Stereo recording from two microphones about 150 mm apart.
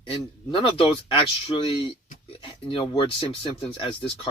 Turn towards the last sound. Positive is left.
turn(degrees=35)  # may be behind; listen again after turning